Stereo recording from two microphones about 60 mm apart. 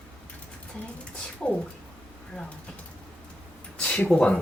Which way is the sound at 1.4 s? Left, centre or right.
Centre.